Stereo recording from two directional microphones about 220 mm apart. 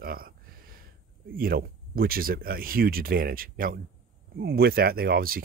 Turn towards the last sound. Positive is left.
turn(degrees=-40)  # may be behind; listen again after turning